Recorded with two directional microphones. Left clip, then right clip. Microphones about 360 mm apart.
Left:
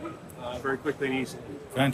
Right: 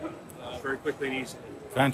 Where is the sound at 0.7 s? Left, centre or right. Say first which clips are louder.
Left 2 dB; centre.